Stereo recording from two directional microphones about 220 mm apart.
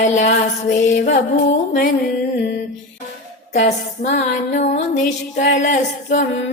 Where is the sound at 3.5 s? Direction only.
30° left (ahead or behind).